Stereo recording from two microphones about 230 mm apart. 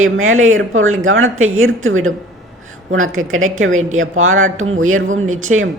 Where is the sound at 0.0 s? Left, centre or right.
Right.